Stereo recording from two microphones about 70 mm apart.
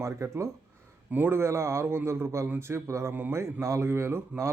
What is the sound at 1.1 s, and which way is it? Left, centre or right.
Speech, right.